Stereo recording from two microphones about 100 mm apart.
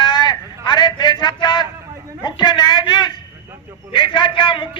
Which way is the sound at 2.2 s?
45° left (ahead or behind).